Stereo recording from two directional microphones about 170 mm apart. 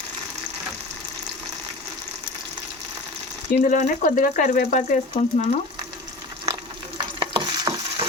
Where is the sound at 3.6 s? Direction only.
50° left (ahead or behind).